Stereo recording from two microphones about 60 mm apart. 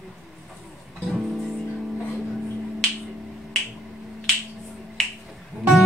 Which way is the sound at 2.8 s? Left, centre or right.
Centre.